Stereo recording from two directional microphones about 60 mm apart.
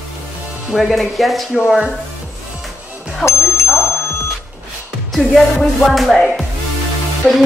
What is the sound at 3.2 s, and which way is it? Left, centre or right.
Music, left.